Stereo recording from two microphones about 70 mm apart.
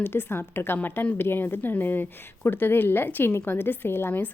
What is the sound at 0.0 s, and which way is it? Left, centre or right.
Speech, left.